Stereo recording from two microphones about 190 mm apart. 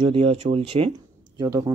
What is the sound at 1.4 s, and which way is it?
Speech, 20° right (ahead or behind).